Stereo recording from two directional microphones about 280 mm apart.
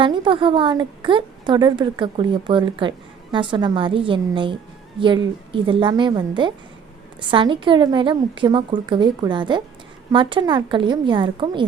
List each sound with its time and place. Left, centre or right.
0.0 s a woman's voice: centre